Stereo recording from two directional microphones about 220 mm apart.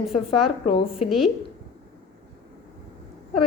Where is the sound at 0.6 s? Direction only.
25° left (ahead or behind).